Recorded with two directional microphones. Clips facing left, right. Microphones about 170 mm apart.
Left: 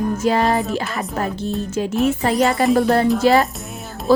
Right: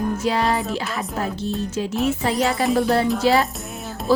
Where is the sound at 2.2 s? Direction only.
55° left (ahead or behind).